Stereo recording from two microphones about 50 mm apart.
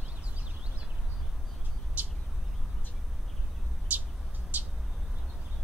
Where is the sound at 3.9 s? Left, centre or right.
Right.